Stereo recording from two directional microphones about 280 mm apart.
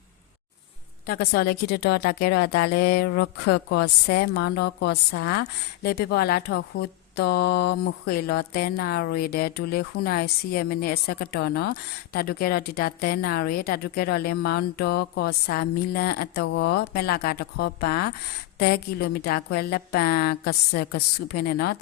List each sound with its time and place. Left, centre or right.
1.0 s a woman's voice: left